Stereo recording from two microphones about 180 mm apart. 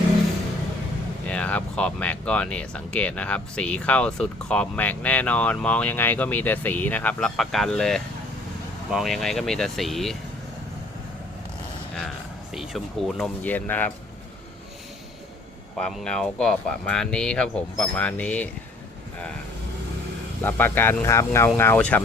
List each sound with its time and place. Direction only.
1.3 s speech: 5° left (ahead or behind)
12.5 s speech: centre (ahead or behind)
15.8 s speech: 5° left (ahead or behind)
20.4 s speech: 10° left (ahead or behind)